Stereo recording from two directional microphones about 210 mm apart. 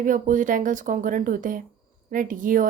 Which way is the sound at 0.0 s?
40° right (ahead or behind).